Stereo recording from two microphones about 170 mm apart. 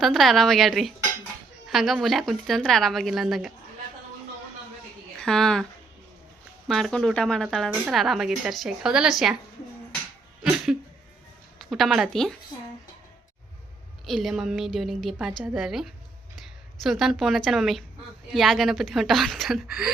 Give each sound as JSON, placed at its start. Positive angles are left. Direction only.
{"t": 0.0, "sound": "a woman's voice", "side_deg": 0}
{"t": 5.2, "sound": "a woman's voice", "side_deg": 5}
{"t": 6.7, "sound": "a woman's voice", "side_deg": 0}
{"t": 11.6, "sound": "a woman's voice", "side_deg": 0}
{"t": 14.1, "sound": "a woman's voice", "side_deg": 0}